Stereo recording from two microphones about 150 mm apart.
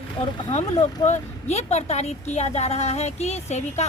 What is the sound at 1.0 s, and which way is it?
A woman's voice, 50° left (ahead or behind).